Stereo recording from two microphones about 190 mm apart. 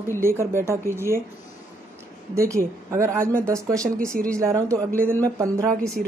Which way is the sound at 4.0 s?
5° left (ahead or behind).